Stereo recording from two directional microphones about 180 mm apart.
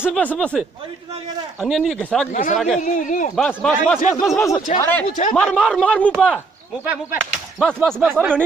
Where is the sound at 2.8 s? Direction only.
45° left (ahead or behind).